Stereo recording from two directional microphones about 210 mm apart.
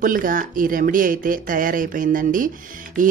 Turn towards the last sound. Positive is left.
turn(degrees=-40)  # may be behind; listen again after turning